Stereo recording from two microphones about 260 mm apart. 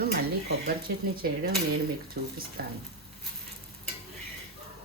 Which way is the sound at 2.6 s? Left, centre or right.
Right.